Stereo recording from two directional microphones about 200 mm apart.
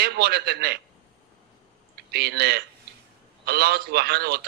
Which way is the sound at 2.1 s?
55° right (ahead or behind).